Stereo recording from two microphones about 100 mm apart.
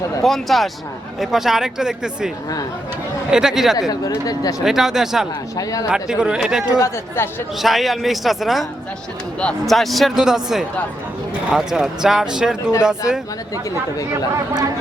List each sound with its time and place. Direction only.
0.2 s speech: centre (ahead or behind)
3.8 s speech: 35° left (ahead or behind)
4.6 s speech: 5° right (ahead or behind)
6.7 s speech: 30° left (ahead or behind)
7.6 s speech: centre (ahead or behind)